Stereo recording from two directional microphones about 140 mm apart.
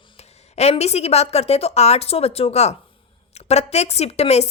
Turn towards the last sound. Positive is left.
turn(degrees=50)  # may be behind; listen again after turning